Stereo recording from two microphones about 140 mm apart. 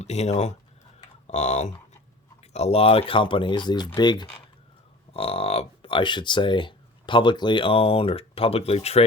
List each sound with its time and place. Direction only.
0.0 s speech: 50° left (ahead or behind); by 4.3 s 30° left (ahead or behind)
5.1 s speech: 45° left (ahead or behind)